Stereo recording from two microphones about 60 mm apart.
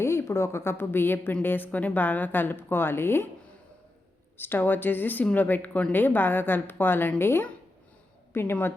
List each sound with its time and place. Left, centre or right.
0.0 s a woman's voice: left
4.4 s a woman's voice: left